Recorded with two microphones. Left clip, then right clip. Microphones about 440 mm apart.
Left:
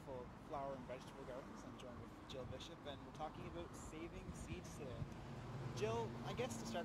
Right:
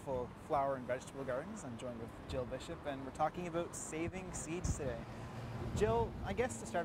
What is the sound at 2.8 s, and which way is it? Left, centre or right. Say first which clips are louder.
Speech: right 14 dB; right.